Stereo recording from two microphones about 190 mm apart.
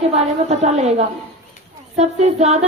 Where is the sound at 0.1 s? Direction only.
35° right (ahead or behind).